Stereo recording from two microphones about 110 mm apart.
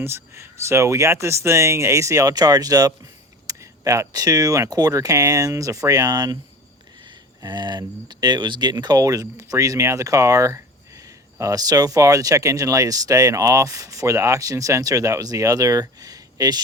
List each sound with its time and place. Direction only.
0.0 s speech: 25° right (ahead or behind)
7.4 s speech: 40° right (ahead or behind)